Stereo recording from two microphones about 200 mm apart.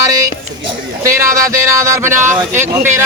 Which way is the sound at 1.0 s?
15° right (ahead or behind).